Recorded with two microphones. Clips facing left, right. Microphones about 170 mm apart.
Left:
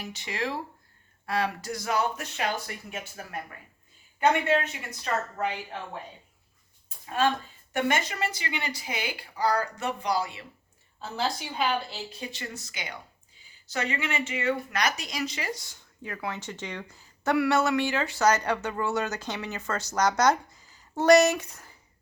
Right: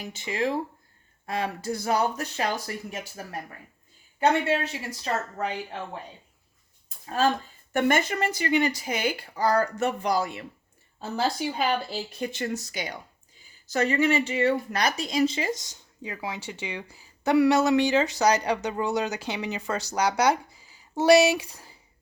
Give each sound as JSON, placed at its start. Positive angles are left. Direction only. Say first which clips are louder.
{"t": 1.3, "sound": "speech", "louder": "even", "side_deg": -25}
{"t": 4.4, "sound": "speech", "louder": "even", "side_deg": -35}
{"t": 6.8, "sound": "a sound", "louder": "right 1 dB", "side_deg": -40}
{"t": 7.7, "sound": "speech", "louder": "right 4 dB", "side_deg": -50}